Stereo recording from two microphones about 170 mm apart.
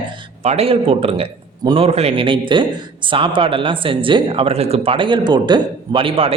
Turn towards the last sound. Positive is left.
turn(degrees=-30)  # may be behind; listen again after turning